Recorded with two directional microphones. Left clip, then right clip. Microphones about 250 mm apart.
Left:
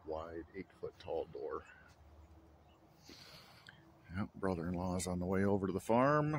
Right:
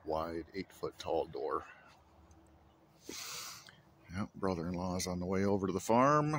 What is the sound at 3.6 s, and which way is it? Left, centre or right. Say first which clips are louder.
Speech: right 1 dB; centre.